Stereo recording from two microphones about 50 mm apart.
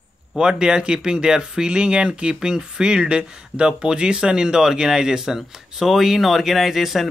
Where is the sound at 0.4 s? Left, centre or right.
Centre.